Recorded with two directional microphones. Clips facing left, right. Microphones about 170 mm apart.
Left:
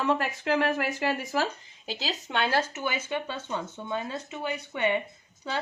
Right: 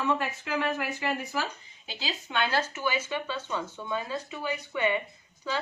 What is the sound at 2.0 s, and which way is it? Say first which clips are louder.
Speech: left 1 dB; 50° left (ahead or behind).